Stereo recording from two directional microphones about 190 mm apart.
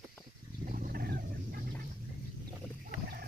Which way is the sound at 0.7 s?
45° right (ahead or behind).